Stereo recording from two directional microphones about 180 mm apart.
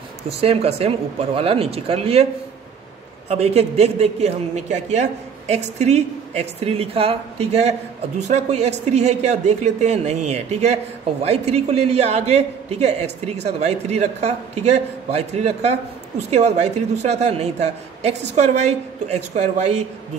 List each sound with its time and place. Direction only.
0.3 s a man's voice: 35° right (ahead or behind)
3.3 s a man's voice: 35° right (ahead or behind)